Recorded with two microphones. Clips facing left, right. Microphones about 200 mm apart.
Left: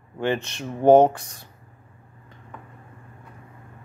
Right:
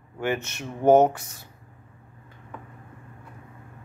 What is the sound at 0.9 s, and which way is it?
Speech, 5° right (ahead or behind).